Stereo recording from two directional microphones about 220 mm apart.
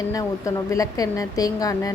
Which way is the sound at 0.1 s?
15° left (ahead or behind).